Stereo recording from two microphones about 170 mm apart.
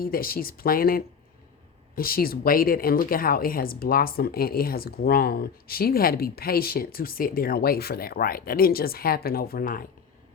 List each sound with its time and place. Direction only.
0.0 s a woman's voice: 60° left (ahead or behind)